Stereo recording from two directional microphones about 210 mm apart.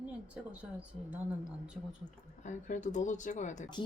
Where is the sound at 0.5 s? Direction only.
5° right (ahead or behind).